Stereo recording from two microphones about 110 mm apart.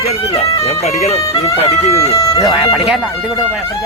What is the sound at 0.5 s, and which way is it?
Speech, 70° left (ahead or behind).